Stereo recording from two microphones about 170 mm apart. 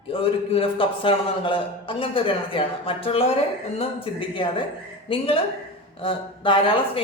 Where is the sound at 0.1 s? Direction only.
35° left (ahead or behind).